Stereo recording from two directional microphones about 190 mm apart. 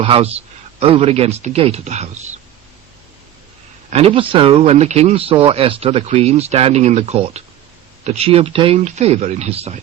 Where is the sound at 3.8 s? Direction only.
30° right (ahead or behind).